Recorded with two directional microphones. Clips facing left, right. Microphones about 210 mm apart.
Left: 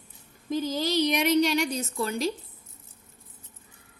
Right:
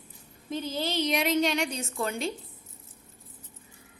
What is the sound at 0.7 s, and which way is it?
Speech, 40° left (ahead or behind).